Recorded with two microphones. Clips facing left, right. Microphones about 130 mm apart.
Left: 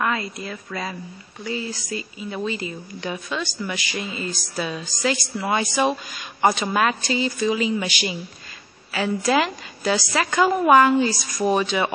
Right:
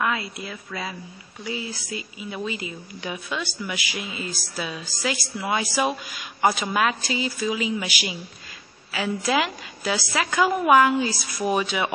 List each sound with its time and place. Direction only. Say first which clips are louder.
0.0 s speech: left 2 dB; 5° right (ahead or behind)